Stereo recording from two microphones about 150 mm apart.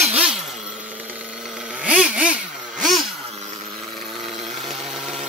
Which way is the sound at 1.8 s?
10° right (ahead or behind).